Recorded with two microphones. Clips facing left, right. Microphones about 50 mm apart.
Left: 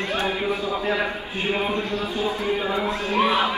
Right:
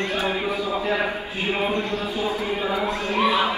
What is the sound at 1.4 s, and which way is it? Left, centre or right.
Speech, centre.